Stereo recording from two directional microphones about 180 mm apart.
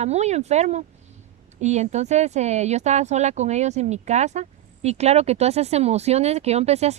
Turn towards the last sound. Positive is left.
turn(degrees=-35)  # may be behind; listen again after turning